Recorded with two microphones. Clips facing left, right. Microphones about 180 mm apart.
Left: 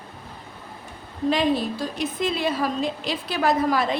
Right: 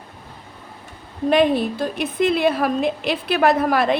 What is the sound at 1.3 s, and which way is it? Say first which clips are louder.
A woman's voice: right 5 dB; 55° right (ahead or behind).